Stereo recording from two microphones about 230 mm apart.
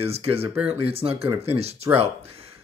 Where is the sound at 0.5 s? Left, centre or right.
Centre.